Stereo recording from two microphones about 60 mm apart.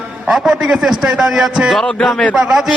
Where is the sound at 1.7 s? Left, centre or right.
Centre.